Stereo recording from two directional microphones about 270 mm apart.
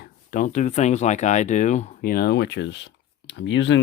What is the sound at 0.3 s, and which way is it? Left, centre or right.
Speech, left.